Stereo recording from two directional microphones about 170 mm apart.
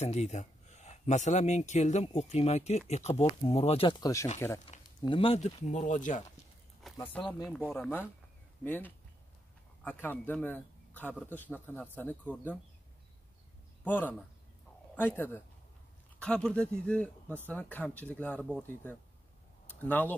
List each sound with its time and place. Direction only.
0.0 s speech: 40° left (ahead or behind); by 4.3 s 20° left (ahead or behind)
4.6 s speech: 30° left (ahead or behind)
5.7 s speech: 45° left (ahead or behind)
6.8 s a sound: centre (ahead or behind)
7.4 s speech: centre (ahead or behind)
7.7 s a man's voice: 10° left (ahead or behind)
13.8 s a man's voice: 10° left (ahead or behind)